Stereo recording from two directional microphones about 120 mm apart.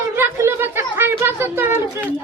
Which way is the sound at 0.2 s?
20° right (ahead or behind).